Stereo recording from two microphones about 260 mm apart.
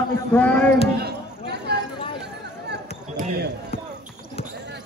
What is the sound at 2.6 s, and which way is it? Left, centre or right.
Basketball bounce, right.